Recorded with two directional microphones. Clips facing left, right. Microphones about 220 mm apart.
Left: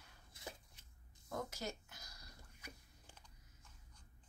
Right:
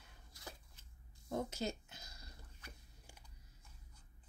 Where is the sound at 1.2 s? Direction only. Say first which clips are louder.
Right 5 dB; 25° right (ahead or behind).